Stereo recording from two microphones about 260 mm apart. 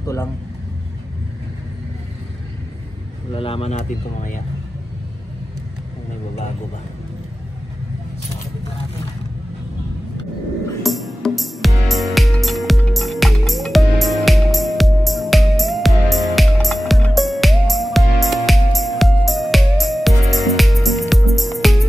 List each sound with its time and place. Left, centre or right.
0.0 s a man's voice: centre
3.3 s speech: left
10.8 s music: centre